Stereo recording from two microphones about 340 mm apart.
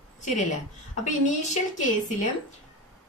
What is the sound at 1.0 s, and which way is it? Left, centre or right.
A woman's voice, left.